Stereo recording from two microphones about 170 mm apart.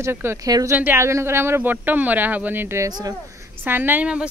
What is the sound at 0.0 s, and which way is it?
Speech, 15° right (ahead or behind).